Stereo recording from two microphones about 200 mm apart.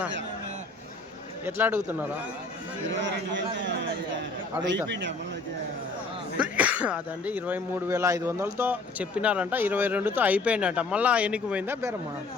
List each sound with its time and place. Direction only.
1.5 s speech: 10° right (ahead or behind)
2.9 s speech: 65° right (ahead or behind)
6.4 s speech: 5° right (ahead or behind)